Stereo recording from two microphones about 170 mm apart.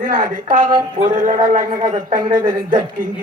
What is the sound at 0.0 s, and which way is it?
A woman's voice, 50° right (ahead or behind).